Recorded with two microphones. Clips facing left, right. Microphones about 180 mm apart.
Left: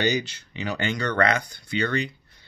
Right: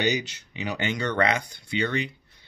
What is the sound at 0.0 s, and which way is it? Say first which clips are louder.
Speech: left 1 dB; 15° right (ahead or behind).